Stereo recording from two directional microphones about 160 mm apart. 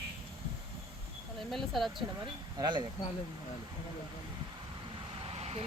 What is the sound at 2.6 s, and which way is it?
Speech, 30° right (ahead or behind).